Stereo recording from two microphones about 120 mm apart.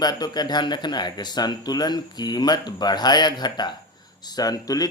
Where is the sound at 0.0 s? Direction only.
35° left (ahead or behind).